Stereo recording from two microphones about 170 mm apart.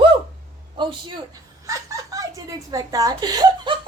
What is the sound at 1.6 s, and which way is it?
Chuckle, 20° right (ahead or behind).